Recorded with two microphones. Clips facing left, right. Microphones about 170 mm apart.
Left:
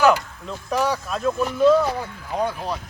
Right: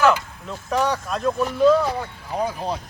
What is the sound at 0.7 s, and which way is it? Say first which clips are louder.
Speech: right 1 dB; 5° left (ahead or behind).